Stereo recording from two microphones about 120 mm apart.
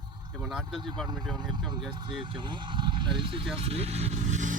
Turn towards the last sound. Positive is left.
turn(degrees=-85)